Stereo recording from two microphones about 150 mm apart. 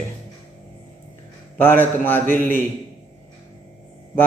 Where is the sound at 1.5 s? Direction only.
15° left (ahead or behind).